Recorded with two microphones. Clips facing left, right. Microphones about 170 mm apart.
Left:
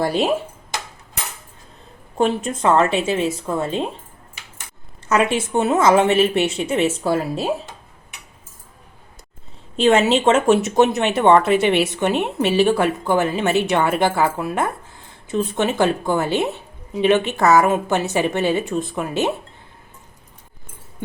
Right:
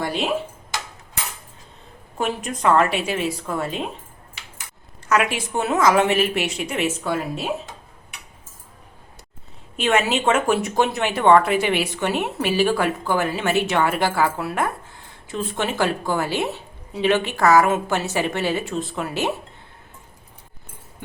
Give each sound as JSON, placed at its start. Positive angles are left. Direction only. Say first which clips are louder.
{"t": 0.0, "sound": "speech", "louder": "left 5 dB", "side_deg": 40}
{"t": 2.1, "sound": "speech", "louder": "left 6 dB", "side_deg": 30}
{"t": 5.0, "sound": "speech", "louder": "left 3 dB", "side_deg": 25}
{"t": 9.7, "sound": "speech", "louder": "left 5 dB", "side_deg": 30}